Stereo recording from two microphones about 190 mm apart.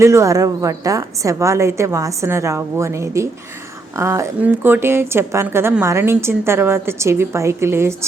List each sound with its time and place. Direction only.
0.0 s a woman's voice: 15° right (ahead or behind)